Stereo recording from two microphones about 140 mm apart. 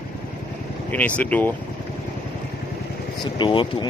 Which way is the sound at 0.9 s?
10° left (ahead or behind).